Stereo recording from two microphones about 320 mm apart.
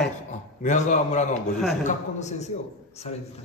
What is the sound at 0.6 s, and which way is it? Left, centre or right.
Speech, left.